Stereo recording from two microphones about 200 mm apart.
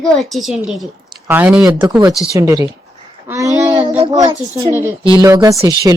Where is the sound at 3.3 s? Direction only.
15° right (ahead or behind).